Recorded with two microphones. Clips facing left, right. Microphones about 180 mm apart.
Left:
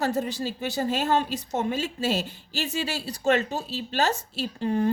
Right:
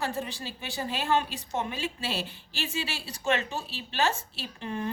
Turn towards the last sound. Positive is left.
turn(degrees=35)  # may be behind; listen again after turning